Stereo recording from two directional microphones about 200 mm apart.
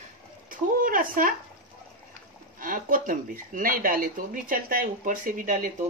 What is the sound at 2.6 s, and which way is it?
Speech, 45° right (ahead or behind).